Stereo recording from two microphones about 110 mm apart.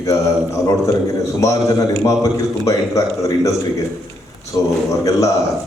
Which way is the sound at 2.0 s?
30° left (ahead or behind).